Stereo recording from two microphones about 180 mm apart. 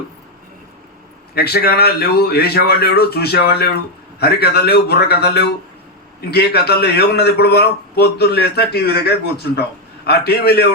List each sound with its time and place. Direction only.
1.4 s a man's voice: 60° left (ahead or behind)